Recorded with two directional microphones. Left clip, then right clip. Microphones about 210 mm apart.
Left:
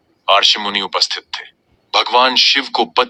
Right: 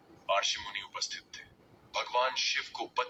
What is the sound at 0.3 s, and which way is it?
Speech, 50° left (ahead or behind).